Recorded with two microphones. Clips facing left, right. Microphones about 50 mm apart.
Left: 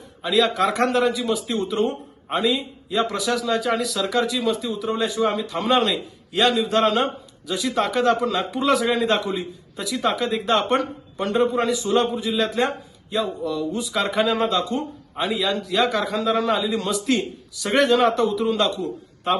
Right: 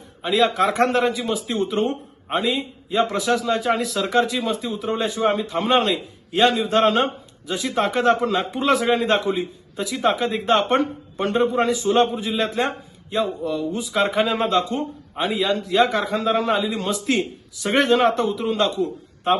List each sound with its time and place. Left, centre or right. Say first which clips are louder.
0.2 s a man's voice: right 1 dB; right
17.2 s speech: right 2 dB; centre
17.7 s a man's voice: even; right